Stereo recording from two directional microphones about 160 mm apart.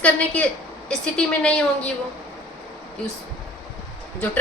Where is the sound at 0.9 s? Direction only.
5° left (ahead or behind).